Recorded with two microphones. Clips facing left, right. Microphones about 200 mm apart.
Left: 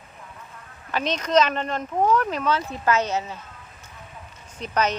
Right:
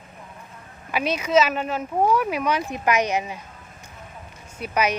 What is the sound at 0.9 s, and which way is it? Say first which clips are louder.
Speech: right 1 dB; 10° right (ahead or behind).